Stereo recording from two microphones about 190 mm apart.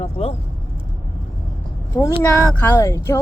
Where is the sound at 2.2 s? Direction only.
10° left (ahead or behind).